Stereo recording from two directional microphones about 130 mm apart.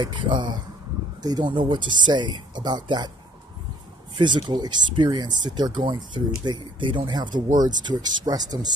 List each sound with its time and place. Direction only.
0.0 s speech: 35° right (ahead or behind)
4.2 s speech: 35° right (ahead or behind)